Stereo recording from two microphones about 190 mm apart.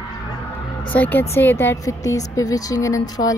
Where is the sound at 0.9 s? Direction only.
10° left (ahead or behind).